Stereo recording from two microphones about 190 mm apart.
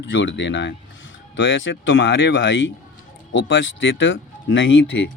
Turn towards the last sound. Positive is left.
turn(degrees=80)